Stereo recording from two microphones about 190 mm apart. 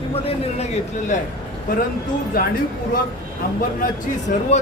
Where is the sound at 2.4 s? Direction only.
50° left (ahead or behind).